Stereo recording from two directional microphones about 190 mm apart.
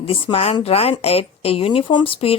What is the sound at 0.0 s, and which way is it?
Speech, 30° left (ahead or behind).